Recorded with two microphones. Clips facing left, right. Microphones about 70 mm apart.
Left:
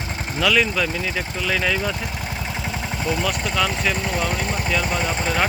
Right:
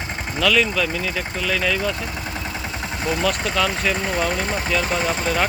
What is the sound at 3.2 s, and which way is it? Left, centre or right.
Speech, centre.